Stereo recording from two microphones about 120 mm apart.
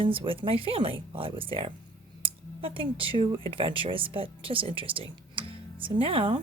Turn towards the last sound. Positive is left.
turn(degrees=-45)  # may be behind; listen again after turning